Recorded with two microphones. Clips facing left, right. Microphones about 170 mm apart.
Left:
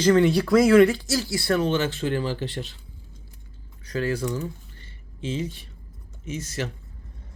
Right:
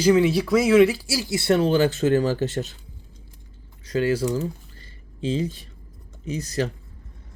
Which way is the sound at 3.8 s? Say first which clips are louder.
Right 4 dB; 25° right (ahead or behind).